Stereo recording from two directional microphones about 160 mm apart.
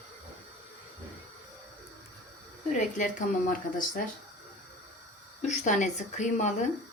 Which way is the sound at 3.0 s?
55° left (ahead or behind).